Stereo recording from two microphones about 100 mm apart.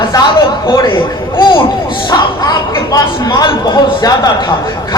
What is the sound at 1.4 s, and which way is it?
Speech, 50° left (ahead or behind).